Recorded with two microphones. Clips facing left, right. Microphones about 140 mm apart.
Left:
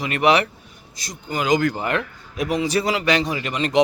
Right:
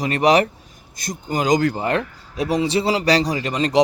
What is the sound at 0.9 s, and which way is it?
A man's voice, 50° right (ahead or behind).